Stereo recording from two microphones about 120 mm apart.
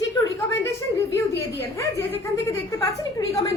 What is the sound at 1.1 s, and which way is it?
A woman's voice, 20° left (ahead or behind).